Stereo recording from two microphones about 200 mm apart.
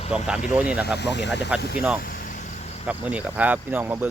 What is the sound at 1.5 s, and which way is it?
Speech, 5° right (ahead or behind).